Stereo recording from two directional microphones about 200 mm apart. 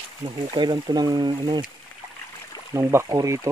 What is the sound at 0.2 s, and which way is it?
Speech, 20° right (ahead or behind).